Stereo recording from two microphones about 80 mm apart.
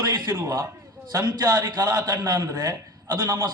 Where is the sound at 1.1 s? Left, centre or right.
Right.